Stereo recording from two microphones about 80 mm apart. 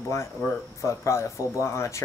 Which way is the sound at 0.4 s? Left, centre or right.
Left.